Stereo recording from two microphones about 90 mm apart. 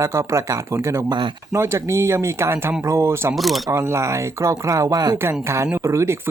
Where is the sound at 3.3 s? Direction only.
Centre (ahead or behind).